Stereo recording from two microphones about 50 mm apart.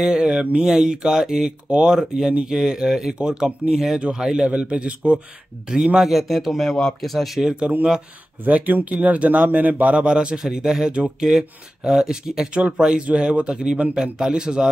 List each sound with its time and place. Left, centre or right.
0.0 s speech: centre
6.0 s speech: centre
8.5 s speech: right; by 14.7 s centre